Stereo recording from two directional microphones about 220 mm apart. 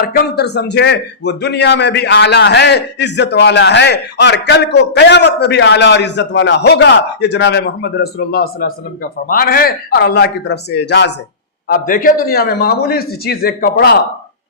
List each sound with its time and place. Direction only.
0.0 s a man's voice: 45° left (ahead or behind)
11.7 s a man's voice: 40° left (ahead or behind)